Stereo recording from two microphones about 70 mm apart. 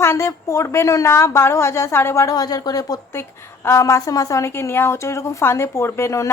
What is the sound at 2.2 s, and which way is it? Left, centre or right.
Speech, left.